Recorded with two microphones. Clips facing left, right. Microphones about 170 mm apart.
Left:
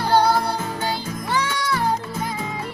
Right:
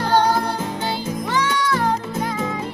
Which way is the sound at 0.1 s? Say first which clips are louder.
Even; 10° left (ahead or behind).